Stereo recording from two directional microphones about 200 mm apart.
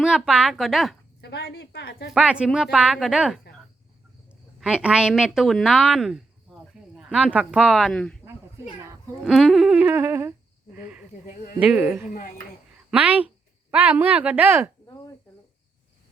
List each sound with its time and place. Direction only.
0.0 s speech: 5° right (ahead or behind)
1.2 s a woman's voice: 55° left (ahead or behind)
2.1 s speech: 5° right (ahead or behind)
4.6 s a woman's voice: 5° right (ahead or behind)
9.2 s speech: centre (ahead or behind)
11.6 s a woman's voice: 5° right (ahead or behind)